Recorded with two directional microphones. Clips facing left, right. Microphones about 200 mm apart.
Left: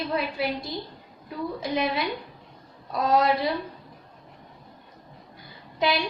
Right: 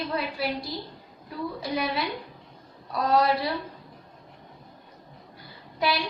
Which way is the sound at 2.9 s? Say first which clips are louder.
Left 1 dB; 20° left (ahead or behind).